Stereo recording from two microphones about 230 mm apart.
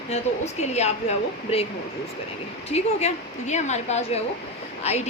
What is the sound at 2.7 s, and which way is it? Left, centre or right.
A woman's voice, left.